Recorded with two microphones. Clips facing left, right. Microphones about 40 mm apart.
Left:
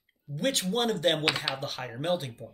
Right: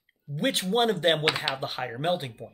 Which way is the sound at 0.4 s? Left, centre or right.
Right.